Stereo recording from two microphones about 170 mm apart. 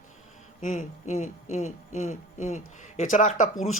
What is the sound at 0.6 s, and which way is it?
A man's voice, 45° left (ahead or behind).